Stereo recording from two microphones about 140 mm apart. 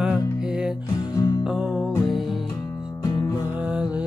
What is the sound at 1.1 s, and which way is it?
Music, 30° left (ahead or behind).